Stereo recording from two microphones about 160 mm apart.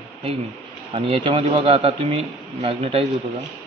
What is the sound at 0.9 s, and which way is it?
A man's voice, 35° right (ahead or behind).